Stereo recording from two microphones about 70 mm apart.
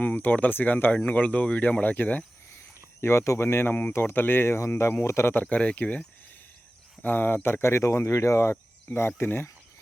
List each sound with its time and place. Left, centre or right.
0.0 s speech: left
3.0 s speech: left